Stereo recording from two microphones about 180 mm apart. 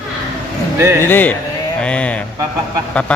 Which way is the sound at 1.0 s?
10° left (ahead or behind).